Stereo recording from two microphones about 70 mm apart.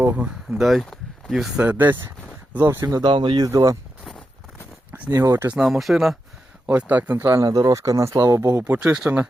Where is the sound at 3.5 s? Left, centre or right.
Right.